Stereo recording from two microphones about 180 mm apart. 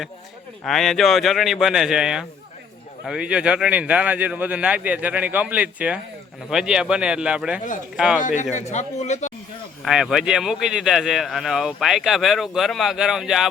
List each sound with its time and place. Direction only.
0.6 s a man's voice: centre (ahead or behind)
8.2 s a man's voice: 45° left (ahead or behind)
9.8 s a man's voice: centre (ahead or behind)